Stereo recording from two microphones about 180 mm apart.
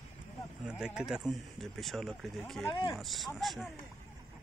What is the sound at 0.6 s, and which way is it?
Speech, 5° right (ahead or behind).